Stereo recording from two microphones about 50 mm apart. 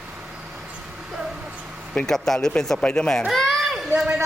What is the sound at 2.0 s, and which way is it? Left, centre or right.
Speech, centre.